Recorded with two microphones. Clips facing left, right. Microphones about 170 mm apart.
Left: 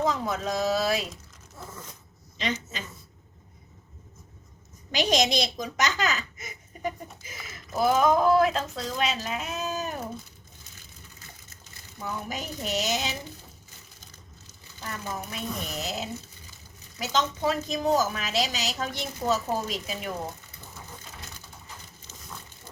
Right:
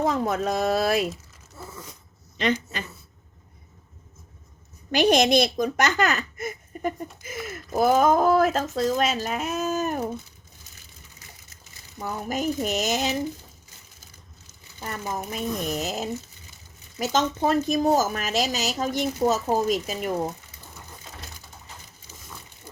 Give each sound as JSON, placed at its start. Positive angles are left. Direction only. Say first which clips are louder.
{"t": 0.0, "sound": "speech", "louder": "right 4 dB", "side_deg": -55}
{"t": 2.4, "sound": "speech", "louder": "right 6 dB", "side_deg": -55}
{"t": 4.9, "sound": "a woman's voice", "louder": "right 6 dB", "side_deg": -55}
{"t": 12.0, "sound": "a woman's voice", "louder": "right 7 dB", "side_deg": -45}
{"t": 15.3, "sound": "a woman's voice", "louder": "right 6 dB", "side_deg": -45}